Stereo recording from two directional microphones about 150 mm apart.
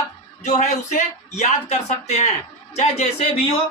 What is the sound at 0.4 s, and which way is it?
Speech, 50° left (ahead or behind).